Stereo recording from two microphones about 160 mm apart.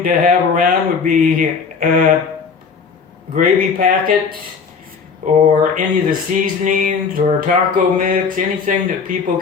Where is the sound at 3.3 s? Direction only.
60° right (ahead or behind).